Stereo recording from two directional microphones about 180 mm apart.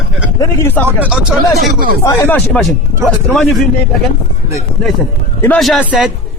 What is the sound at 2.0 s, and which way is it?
Speech, 15° left (ahead or behind).